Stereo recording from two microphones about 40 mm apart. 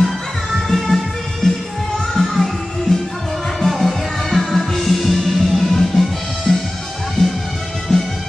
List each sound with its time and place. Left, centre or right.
0.7 s music: centre
7.9 s music: centre